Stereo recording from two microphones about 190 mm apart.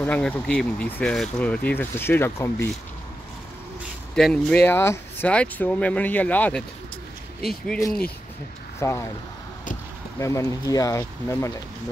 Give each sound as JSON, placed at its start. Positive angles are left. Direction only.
{"t": 0.0, "sound": "speech", "side_deg": 10}
{"t": 4.1, "sound": "speech", "side_deg": 5}
{"t": 8.7, "sound": "speech", "side_deg": 15}
{"t": 10.1, "sound": "speech", "side_deg": 15}